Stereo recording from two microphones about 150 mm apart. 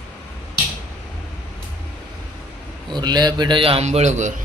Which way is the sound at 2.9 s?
30° right (ahead or behind).